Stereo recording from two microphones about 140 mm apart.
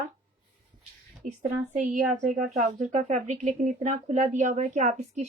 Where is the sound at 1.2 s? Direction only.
60° right (ahead or behind).